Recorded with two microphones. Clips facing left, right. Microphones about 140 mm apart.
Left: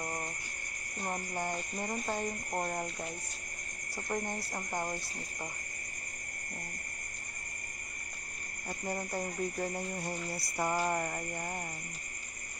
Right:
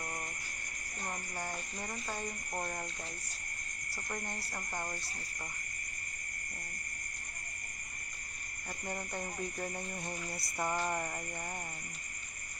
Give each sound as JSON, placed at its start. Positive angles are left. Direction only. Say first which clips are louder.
{"t": 0.0, "sound": "cricket", "louder": "left 4 dB", "side_deg": 25}
{"t": 2.0, "sound": "speech", "louder": "left 5 dB", "side_deg": 20}
{"t": 3.9, "sound": "cricket", "louder": "left 6 dB", "side_deg": 15}
{"t": 8.6, "sound": "cricket", "louder": "left 4 dB", "side_deg": 10}